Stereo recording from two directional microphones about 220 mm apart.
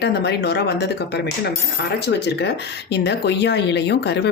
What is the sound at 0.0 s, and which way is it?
Speech, 50° left (ahead or behind).